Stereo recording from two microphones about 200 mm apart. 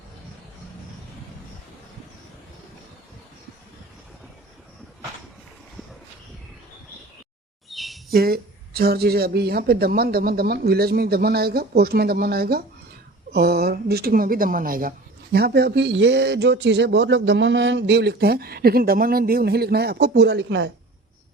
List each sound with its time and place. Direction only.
7.7 s bird vocalization: centre (ahead or behind)
8.1 s speech: 50° right (ahead or behind)